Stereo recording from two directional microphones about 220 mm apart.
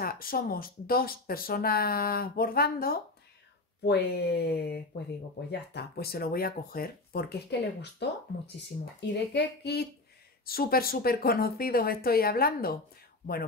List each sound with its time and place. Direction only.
0.0 s speech: 40° left (ahead or behind)